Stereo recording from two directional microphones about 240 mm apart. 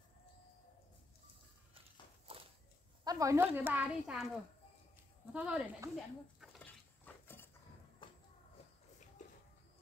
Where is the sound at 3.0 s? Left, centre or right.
Centre.